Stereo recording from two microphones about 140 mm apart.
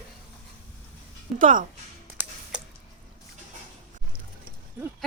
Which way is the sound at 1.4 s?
70° right (ahead or behind).